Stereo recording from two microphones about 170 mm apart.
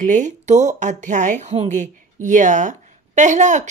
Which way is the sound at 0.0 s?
45° right (ahead or behind).